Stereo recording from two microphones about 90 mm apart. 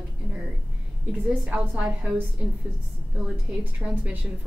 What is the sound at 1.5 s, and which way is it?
Speech, 15° right (ahead or behind).